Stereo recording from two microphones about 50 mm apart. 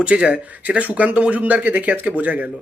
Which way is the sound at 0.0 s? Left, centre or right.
Right.